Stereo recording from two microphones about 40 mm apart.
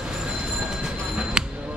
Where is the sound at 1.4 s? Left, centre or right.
Centre.